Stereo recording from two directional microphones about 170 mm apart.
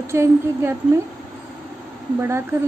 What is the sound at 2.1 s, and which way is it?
Speech, 15° right (ahead or behind).